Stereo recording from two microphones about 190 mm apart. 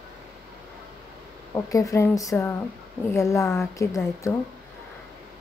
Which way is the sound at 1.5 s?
15° left (ahead or behind).